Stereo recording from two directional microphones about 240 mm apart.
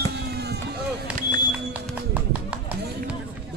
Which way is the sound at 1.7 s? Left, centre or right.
Centre.